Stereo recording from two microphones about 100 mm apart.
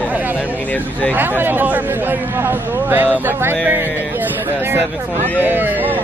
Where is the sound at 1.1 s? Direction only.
20° right (ahead or behind).